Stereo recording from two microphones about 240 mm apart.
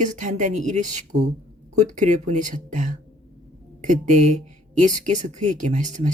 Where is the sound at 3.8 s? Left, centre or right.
Right.